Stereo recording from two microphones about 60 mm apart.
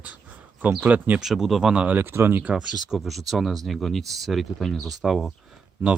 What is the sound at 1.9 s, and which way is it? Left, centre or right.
Speech, right.